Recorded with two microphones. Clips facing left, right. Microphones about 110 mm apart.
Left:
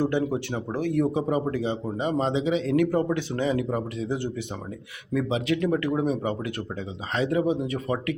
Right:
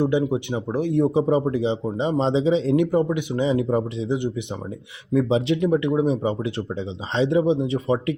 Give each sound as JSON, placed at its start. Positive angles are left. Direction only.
{"t": 0.0, "sound": "speech", "side_deg": -15}